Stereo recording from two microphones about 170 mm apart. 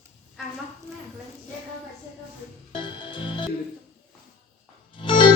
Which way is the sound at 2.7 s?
30° left (ahead or behind).